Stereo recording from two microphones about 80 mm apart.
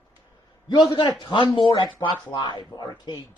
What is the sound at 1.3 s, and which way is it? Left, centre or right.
Speech, left.